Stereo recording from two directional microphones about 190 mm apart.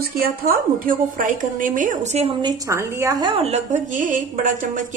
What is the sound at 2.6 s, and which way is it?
A woman's voice, 15° right (ahead or behind).